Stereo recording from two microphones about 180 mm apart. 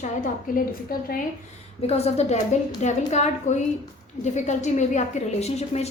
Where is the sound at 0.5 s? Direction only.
50° left (ahead or behind).